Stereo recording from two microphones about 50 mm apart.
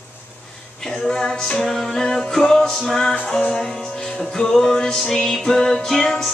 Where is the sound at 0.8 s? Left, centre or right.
Centre.